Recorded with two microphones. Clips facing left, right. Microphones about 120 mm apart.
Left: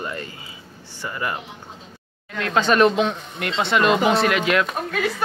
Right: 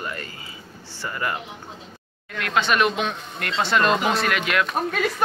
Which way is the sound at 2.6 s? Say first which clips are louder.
Left 5 dB; 35° left (ahead or behind).